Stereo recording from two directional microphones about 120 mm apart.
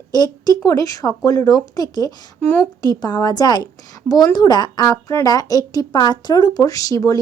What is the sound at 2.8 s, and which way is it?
A woman's voice, 35° left (ahead or behind).